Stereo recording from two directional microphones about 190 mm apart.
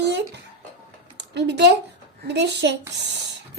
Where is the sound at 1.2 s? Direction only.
65° right (ahead or behind).